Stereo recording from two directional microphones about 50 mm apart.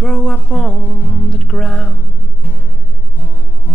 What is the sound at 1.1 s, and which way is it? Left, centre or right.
Music, centre.